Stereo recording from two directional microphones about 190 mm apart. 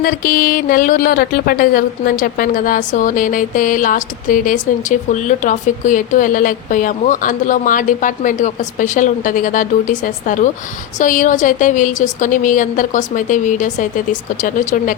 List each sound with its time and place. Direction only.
0.0 s speech: 50° left (ahead or behind)